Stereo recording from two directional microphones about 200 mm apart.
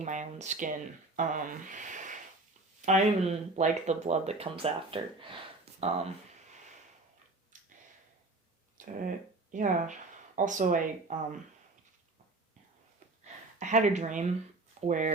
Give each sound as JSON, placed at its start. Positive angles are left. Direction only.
{"t": 0.0, "sound": "speech", "side_deg": -35}
{"t": 7.5, "sound": "a sound", "side_deg": -40}
{"t": 8.8, "sound": "speech", "side_deg": -40}
{"t": 13.6, "sound": "speech", "side_deg": -40}